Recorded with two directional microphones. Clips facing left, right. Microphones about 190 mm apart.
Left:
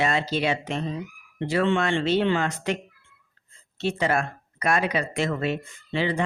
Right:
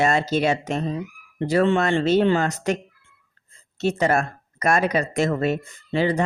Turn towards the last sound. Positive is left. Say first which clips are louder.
# right 4 dB
turn(degrees=-40)  # may be behind; listen again after turning